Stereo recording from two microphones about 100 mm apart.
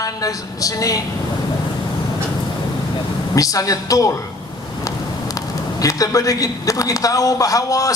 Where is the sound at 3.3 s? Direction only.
35° left (ahead or behind).